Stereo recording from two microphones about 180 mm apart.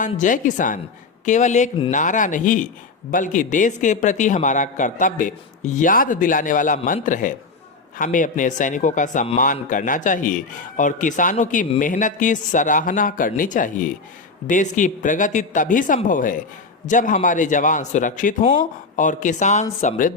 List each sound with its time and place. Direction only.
0.0 s a man's voice: 45° left (ahead or behind)